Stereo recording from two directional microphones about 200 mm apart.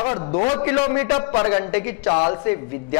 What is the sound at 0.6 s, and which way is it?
A man's voice, 15° left (ahead or behind).